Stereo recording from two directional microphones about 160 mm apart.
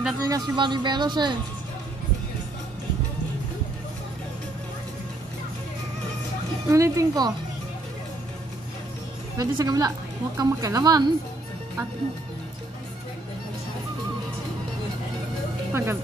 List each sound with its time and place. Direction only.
0.2 s a woman's voice: 25° right (ahead or behind)
6.7 s a woman's voice: 20° right (ahead or behind)
9.4 s a woman's voice: 20° right (ahead or behind)
15.7 s speech: 15° right (ahead or behind)